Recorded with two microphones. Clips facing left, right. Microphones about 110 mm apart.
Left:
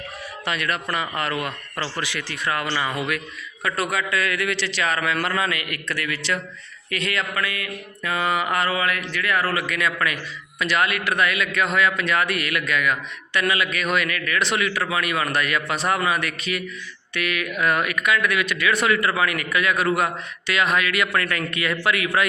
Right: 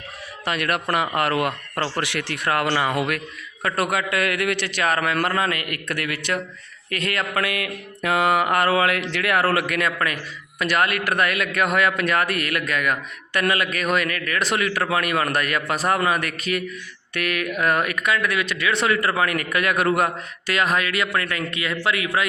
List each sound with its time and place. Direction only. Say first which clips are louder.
0.4 s a man's voice: right 3 dB; 50° right (ahead or behind)
7.4 s mantra: right 3 dB; 75° right (ahead or behind); by 9.9 s 55° right (ahead or behind)
10.6 s a man's voice: right 1 dB; 50° right (ahead or behind)
20.5 s speech: even; 40° right (ahead or behind); by 22.3 s 25° right (ahead or behind)